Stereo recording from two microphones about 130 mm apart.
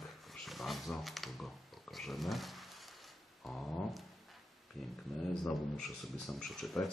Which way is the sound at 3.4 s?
Centre (ahead or behind).